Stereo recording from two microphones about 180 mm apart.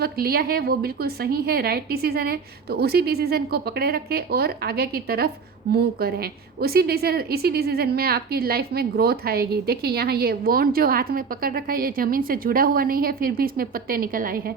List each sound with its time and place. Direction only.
0.0 s a woman's voice: 60° right (ahead or behind)